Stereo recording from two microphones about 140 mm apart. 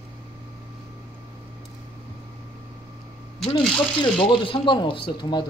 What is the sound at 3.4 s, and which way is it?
Speech, 35° left (ahead or behind).